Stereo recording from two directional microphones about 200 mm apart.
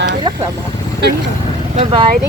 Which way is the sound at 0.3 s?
25° right (ahead or behind).